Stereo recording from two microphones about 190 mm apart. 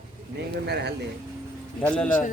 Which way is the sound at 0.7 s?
60° right (ahead or behind).